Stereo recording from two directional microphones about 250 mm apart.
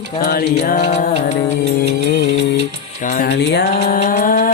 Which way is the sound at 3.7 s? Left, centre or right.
Left.